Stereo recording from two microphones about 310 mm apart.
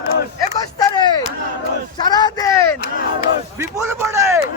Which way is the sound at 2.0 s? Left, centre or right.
Centre.